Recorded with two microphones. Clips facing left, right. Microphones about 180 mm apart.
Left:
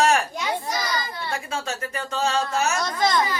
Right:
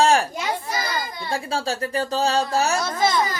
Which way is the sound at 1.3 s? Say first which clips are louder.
Right 6 dB; 30° right (ahead or behind).